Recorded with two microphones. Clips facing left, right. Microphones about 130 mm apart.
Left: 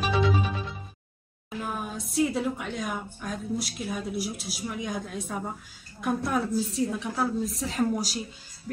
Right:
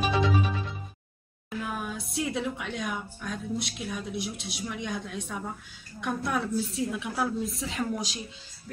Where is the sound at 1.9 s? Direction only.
Centre (ahead or behind).